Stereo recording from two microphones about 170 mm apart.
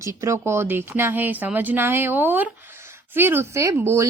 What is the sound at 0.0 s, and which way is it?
A woman's voice, 15° right (ahead or behind).